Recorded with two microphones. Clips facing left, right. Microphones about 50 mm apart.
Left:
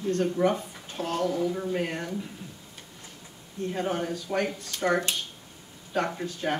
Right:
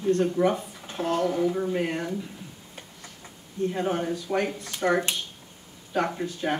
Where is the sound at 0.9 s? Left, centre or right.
Right.